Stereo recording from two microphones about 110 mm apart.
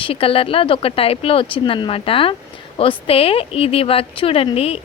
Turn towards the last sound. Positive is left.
turn(degrees=65)  # may be behind; listen again after turning